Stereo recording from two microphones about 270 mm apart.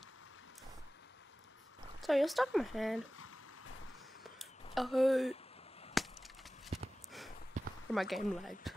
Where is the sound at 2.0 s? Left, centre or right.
Centre.